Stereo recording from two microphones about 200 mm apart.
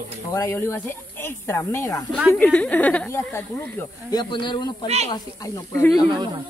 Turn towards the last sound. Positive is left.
turn(degrees=-20)  # may be behind; listen again after turning